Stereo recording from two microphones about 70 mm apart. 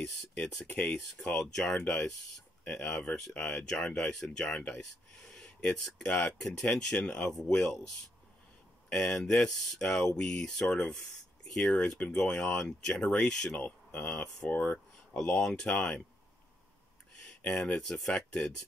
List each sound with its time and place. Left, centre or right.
0.0 s speech: centre
0.7 s speech: left
1.2 s speech: centre
17.6 s speech: centre